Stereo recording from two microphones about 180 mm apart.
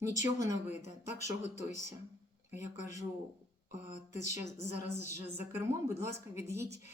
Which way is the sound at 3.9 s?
40° left (ahead or behind).